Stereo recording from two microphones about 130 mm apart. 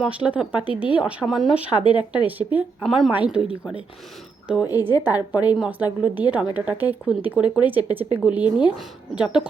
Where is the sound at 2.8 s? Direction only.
Centre (ahead or behind).